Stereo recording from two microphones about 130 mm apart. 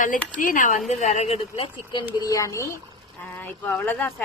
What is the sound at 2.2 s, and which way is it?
A woman's voice, 25° left (ahead or behind).